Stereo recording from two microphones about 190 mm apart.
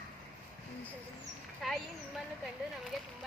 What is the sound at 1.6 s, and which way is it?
Speech, centre (ahead or behind).